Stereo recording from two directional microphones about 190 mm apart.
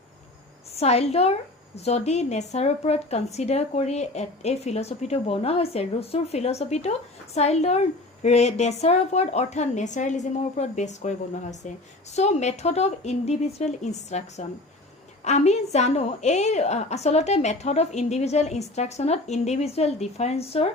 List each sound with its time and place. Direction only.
0.8 s a woman's voice: 35° left (ahead or behind)
12.1 s a woman's voice: 35° left (ahead or behind)